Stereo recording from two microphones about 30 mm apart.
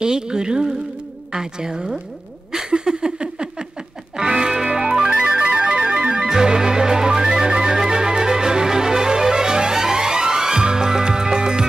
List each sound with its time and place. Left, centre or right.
0.0 s speech: right
2.7 s a sound: right
4.2 s music: right
5.1 s music: right